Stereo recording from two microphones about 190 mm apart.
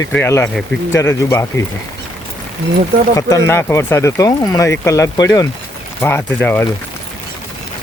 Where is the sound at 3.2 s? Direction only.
15° left (ahead or behind).